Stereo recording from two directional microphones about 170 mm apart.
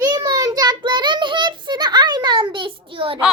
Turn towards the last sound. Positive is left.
turn(degrees=-30)  # may be behind; listen again after turning